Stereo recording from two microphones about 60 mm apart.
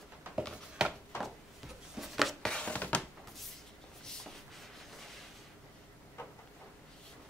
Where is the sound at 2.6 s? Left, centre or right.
Left.